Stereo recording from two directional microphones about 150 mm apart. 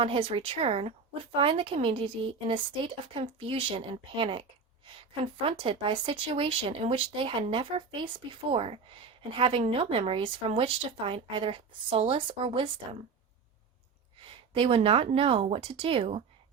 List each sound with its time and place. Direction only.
0.0 s speech: 35° right (ahead or behind)
14.3 s speech: 35° right (ahead or behind)